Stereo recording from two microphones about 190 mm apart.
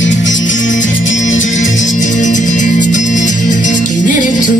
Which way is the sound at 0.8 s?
85° left.